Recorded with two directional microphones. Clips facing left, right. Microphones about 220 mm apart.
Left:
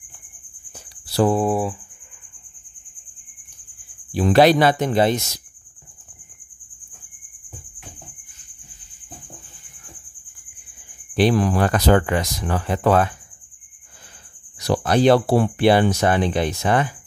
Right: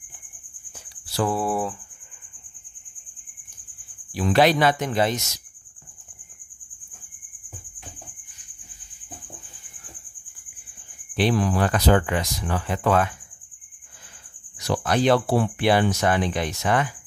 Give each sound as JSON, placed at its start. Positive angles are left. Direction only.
{"t": 0.7, "sound": "a sound", "side_deg": 35}
{"t": 4.1, "sound": "speech", "side_deg": 35}
{"t": 11.1, "sound": "speech", "side_deg": 45}
{"t": 14.6, "sound": "speech", "side_deg": 35}